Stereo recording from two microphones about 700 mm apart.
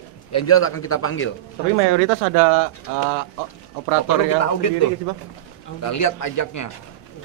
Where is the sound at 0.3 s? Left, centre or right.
Centre.